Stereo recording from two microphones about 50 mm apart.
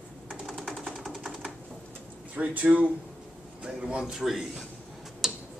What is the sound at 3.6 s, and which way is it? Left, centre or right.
Speech, centre.